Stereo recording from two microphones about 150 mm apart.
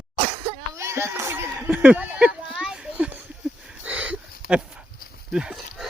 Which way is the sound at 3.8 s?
10° right (ahead or behind).